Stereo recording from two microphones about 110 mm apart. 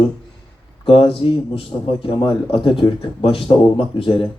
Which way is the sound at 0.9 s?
55° left (ahead or behind).